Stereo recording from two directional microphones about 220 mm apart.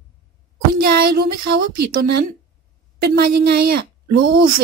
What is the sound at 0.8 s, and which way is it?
A woman's voice, 45° right (ahead or behind).